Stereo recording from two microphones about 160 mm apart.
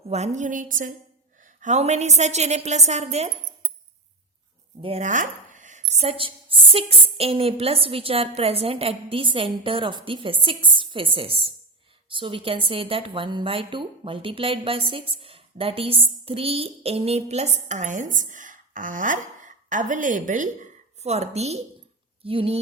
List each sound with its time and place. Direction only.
0.1 s a woman's voice: 45° right (ahead or behind)
4.8 s a woman's voice: 35° right (ahead or behind)
5.0 s a woman's voice: 50° right (ahead or behind); by 22.5 s 35° right (ahead or behind)